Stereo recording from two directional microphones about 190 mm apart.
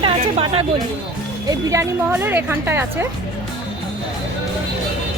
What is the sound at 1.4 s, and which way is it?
Speech, 15° right (ahead or behind).